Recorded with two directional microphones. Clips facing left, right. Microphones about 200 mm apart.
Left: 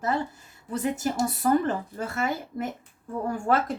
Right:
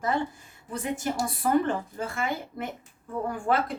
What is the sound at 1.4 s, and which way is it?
Speech, 40° left (ahead or behind).